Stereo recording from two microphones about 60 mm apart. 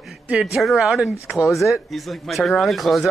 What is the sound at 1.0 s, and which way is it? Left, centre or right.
Speech, centre.